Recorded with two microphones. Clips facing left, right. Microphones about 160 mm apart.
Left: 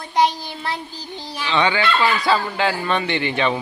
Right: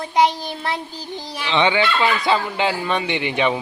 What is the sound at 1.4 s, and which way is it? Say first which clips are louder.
Speech: right 1 dB; 20° right (ahead or behind).